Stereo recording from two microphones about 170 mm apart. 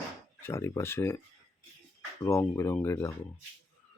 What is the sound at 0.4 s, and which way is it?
Speech, 15° left (ahead or behind).